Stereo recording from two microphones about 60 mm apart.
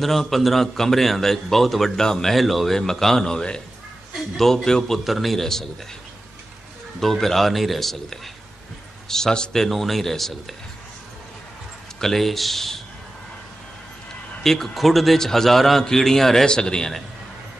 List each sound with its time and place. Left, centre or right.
0.0 s a man's voice: centre
7.0 s a man's voice: centre
12.0 s a man's voice: centre
14.4 s a man's voice: centre